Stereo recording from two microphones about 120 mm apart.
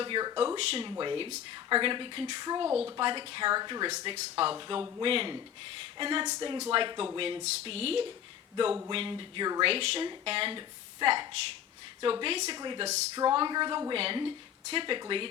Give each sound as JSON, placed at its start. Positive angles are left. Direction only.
{"t": 0.0, "sound": "speech", "side_deg": -40}
{"t": 0.3, "sound": "a woman's voice", "side_deg": -50}
{"t": 4.0, "sound": "speech", "side_deg": -50}
{"t": 4.7, "sound": "a woman's voice", "side_deg": -35}
{"t": 5.0, "sound": "a woman's voice", "side_deg": -50}
{"t": 9.6, "sound": "a woman's voice", "side_deg": -55}
{"t": 12.8, "sound": "speech", "side_deg": -70}
{"t": 13.1, "sound": "a woman's voice", "side_deg": -40}
{"t": 13.9, "sound": "speech", "side_deg": -50}